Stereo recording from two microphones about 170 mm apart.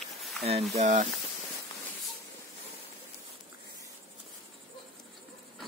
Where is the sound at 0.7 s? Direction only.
40° right (ahead or behind).